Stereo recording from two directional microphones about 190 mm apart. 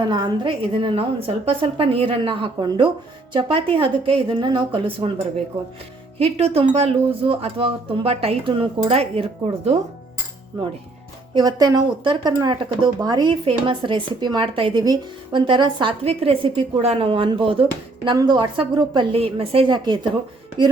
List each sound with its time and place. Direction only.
0.1 s speech: 25° right (ahead or behind)
6.1 s speech: 30° right (ahead or behind)